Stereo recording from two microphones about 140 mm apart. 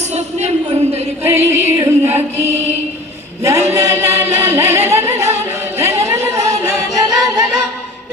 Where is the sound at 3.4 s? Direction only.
20° right (ahead or behind).